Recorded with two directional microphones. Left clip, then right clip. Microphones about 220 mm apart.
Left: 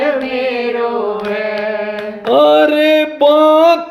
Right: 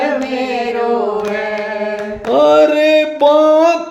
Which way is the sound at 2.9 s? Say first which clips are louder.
Even; 30° left (ahead or behind).